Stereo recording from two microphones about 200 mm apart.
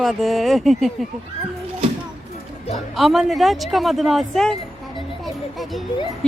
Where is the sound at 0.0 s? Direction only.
Centre (ahead or behind).